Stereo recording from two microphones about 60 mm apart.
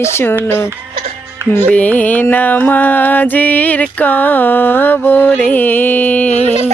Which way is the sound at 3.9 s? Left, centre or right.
Left.